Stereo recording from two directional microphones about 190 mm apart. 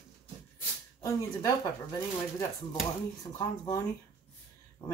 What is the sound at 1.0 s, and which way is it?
Speech, 15° left (ahead or behind).